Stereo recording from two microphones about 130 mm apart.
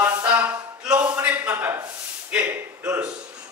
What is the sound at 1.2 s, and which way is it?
Speech, 15° right (ahead or behind).